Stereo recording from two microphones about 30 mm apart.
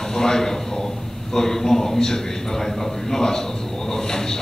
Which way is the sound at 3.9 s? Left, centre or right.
Centre.